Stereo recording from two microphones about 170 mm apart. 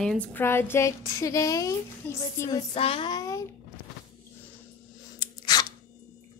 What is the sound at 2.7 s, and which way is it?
Child singing, 35° left (ahead or behind).